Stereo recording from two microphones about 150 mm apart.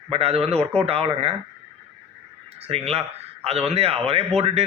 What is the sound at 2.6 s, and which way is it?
A man's voice, 40° right (ahead or behind).